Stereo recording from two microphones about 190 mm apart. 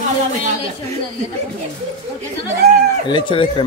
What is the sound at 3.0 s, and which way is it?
Speech, 25° left (ahead or behind).